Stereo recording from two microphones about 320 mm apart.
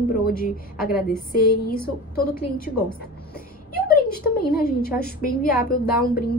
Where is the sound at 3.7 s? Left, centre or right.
Left.